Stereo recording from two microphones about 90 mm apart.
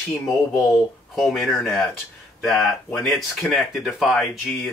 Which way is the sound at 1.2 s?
Centre (ahead or behind).